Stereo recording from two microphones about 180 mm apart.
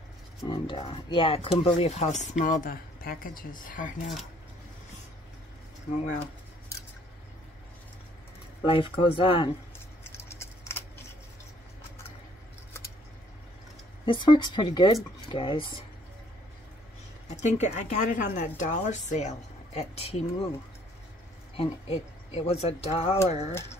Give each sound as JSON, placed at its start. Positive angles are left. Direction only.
{"t": 0.4, "sound": "speech", "side_deg": 30}
{"t": 8.6, "sound": "speech", "side_deg": 30}
{"t": 10.2, "sound": "a sound", "side_deg": 15}
{"t": 14.0, "sound": "speech", "side_deg": 25}
{"t": 17.3, "sound": "speech", "side_deg": 40}
{"t": 21.5, "sound": "speech", "side_deg": 35}